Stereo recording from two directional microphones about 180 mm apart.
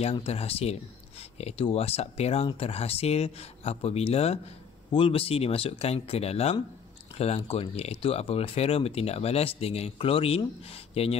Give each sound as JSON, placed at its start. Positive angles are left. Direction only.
{"t": 0.0, "sound": "speech", "side_deg": 35}